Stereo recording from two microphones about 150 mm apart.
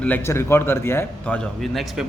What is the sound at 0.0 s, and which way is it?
A man's voice, 15° left (ahead or behind).